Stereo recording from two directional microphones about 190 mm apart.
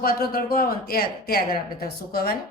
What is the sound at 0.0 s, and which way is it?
A woman's voice, 50° left (ahead or behind).